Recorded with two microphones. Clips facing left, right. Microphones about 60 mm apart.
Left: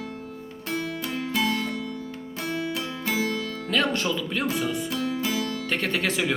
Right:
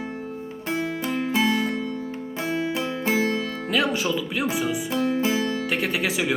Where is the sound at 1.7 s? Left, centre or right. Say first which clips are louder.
Right 4 dB; right.